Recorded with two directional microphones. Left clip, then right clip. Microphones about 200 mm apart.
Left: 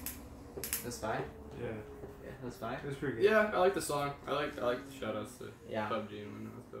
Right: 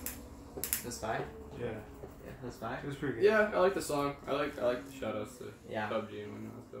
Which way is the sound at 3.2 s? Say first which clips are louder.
Right 1 dB; 20° left (ahead or behind).